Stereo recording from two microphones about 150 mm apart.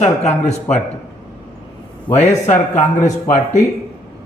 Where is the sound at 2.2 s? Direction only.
55° left (ahead or behind).